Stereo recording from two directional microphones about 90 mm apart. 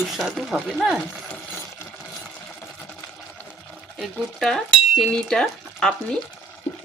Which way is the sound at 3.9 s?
Centre (ahead or behind).